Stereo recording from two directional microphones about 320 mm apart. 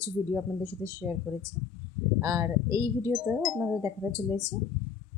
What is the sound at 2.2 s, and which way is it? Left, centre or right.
Speech, centre.